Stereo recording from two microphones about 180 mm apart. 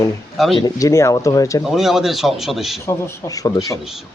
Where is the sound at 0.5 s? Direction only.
20° left (ahead or behind).